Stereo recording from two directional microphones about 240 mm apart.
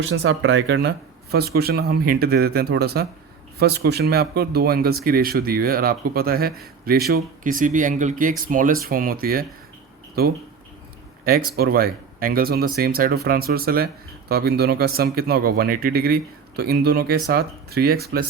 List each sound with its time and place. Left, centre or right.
0.0 s speech: right
11.3 s speech: right